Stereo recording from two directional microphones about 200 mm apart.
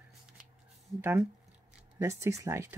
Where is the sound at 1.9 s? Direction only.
15° right (ahead or behind).